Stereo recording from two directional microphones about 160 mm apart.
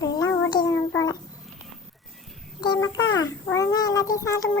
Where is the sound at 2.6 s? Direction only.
30° left (ahead or behind).